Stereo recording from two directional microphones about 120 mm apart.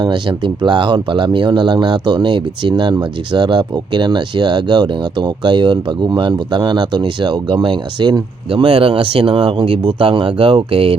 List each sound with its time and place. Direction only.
0.0 s speech: 40° right (ahead or behind)